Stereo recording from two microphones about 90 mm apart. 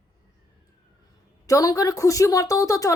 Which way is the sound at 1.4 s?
40° left (ahead or behind).